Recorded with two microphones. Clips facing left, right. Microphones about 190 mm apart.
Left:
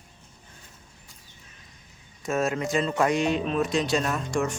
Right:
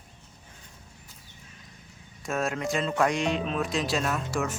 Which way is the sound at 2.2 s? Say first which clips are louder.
Left 3 dB; centre (ahead or behind).